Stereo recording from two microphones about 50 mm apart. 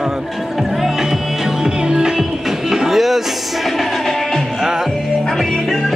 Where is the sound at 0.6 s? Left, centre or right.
Centre.